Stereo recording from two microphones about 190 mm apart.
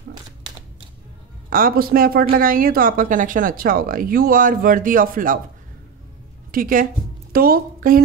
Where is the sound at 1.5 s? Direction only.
50° right (ahead or behind).